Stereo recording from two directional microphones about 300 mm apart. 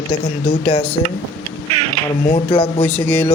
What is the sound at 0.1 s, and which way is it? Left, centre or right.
Speech, centre.